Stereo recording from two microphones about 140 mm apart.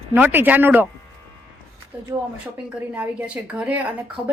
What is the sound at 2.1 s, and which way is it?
Speech, 30° right (ahead or behind).